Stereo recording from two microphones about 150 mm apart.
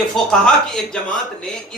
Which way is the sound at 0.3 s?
5° left (ahead or behind).